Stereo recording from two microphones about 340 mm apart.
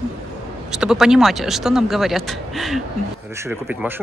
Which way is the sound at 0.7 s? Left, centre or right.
Centre.